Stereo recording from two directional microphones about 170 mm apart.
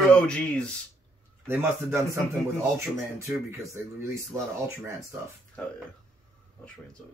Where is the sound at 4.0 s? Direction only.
15° right (ahead or behind).